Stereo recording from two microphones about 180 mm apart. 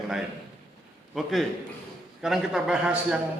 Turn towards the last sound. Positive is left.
turn(degrees=-5)  # may be behind; listen again after turning